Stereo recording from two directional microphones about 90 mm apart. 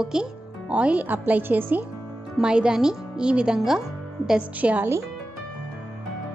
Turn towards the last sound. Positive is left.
turn(degrees=-15)  # may be behind; listen again after turning